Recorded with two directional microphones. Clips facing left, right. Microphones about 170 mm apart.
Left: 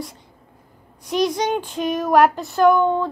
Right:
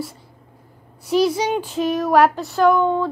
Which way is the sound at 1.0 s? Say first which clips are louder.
Right 2 dB; 5° right (ahead or behind).